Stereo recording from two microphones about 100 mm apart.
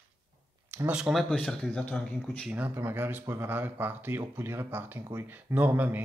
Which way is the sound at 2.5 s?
20° right (ahead or behind).